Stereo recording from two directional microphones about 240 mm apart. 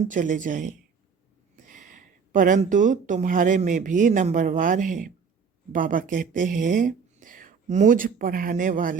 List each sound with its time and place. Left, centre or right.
0.1 s speech: right
1.7 s speech: right